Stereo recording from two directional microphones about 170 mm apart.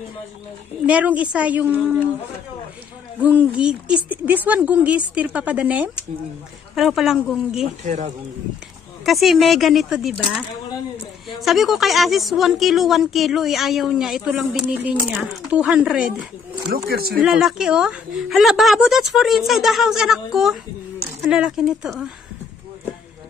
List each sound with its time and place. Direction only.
0.8 s speech: 10° right (ahead or behind)
3.2 s a woman's voice: 10° right (ahead or behind)
7.6 s speech: 45° right (ahead or behind)
9.0 s a woman's voice: centre (ahead or behind)
16.6 s speech: 65° right (ahead or behind)
17.2 s a woman's voice: 5° right (ahead or behind)